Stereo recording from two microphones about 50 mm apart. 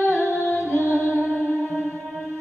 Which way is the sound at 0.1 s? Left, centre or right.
Left.